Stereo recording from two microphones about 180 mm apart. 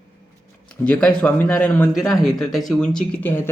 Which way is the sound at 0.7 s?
5° left (ahead or behind).